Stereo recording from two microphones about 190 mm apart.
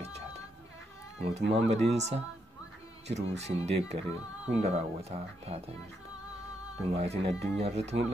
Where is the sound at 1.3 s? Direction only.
35° right (ahead or behind).